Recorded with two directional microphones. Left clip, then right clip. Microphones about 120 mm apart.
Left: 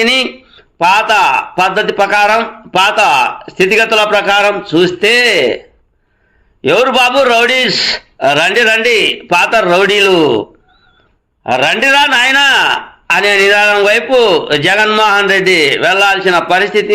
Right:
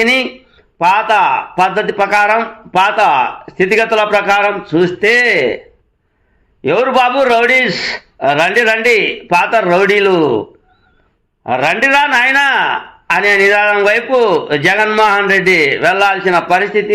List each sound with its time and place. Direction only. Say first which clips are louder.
0.0 s a man's voice: left 1 dB; 15° left (ahead or behind)
3.8 s a man's voice: left 2 dB; 15° left (ahead or behind)
6.6 s a man's voice: left 2 dB; 15° left (ahead or behind)
11.4 s a man's voice: left 2 dB; 20° left (ahead or behind)